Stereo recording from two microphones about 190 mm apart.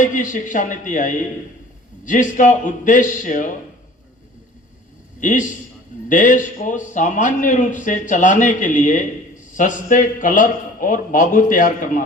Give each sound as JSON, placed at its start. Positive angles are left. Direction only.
{"t": 0.0, "sound": "a man's voice", "side_deg": 45}
{"t": 5.2, "sound": "a man's voice", "side_deg": 40}